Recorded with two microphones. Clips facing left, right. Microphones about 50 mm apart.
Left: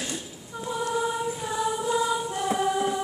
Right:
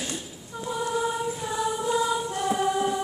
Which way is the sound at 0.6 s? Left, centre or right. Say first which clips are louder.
Even; centre.